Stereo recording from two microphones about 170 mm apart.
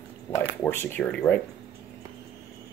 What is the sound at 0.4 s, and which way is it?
Speech, 10° left (ahead or behind).